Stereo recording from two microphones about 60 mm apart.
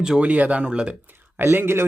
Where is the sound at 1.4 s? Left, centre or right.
Right.